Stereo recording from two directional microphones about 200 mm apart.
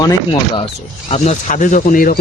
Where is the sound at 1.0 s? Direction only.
35° left (ahead or behind).